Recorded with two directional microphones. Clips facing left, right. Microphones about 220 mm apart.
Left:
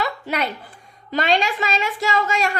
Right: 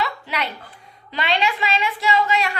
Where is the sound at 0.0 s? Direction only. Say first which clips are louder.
Left 2 dB; 45° left (ahead or behind).